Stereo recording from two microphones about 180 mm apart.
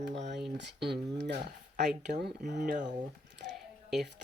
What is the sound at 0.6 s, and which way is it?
Speech, 70° right (ahead or behind).